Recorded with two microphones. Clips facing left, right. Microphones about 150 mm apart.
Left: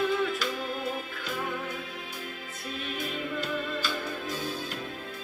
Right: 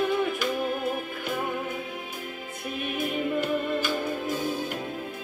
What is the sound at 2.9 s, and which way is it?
Music, 55° right (ahead or behind).